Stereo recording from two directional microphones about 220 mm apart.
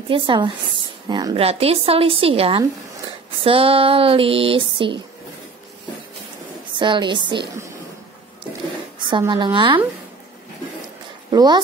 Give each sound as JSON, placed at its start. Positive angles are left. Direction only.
{"t": 0.1, "sound": "a woman's voice", "side_deg": -20}
{"t": 6.8, "sound": "a woman's voice", "side_deg": -20}
{"t": 9.0, "sound": "a woman's voice", "side_deg": -20}
{"t": 11.2, "sound": "speech", "side_deg": -20}